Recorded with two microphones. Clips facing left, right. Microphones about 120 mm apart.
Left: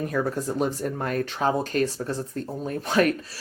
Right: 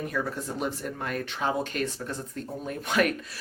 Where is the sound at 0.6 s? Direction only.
40° left (ahead or behind).